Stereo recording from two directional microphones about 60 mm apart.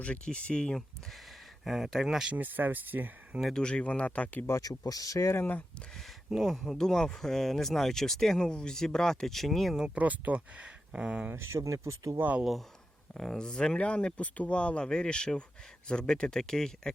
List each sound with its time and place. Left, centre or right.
0.0 s speech: centre
1.6 s speech: centre
2.3 s speech: right
3.5 s speech: centre
4.7 s speech: left
5.3 s speech: left
6.3 s speech: centre
6.7 s speech: centre
9.7 s speech: centre
10.0 s speech: right
11.3 s speech: right
13.1 s speech: centre